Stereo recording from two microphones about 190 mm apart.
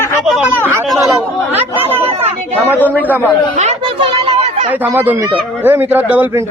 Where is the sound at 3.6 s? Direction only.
30° right (ahead or behind).